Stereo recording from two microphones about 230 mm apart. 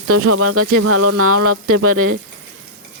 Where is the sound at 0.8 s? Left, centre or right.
Right.